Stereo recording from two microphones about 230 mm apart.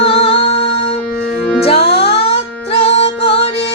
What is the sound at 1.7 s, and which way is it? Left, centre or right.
Music, left.